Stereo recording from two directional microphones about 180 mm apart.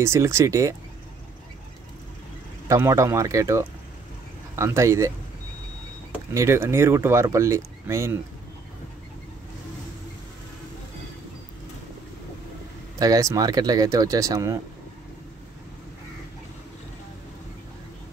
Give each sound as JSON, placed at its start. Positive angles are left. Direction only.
{"t": 0.0, "sound": "speech", "side_deg": -15}
{"t": 2.7, "sound": "speech", "side_deg": -15}
{"t": 6.3, "sound": "speech", "side_deg": -15}
{"t": 13.0, "sound": "speech", "side_deg": -20}